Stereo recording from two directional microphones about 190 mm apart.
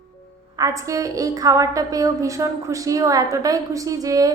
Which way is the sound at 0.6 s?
15° right (ahead or behind).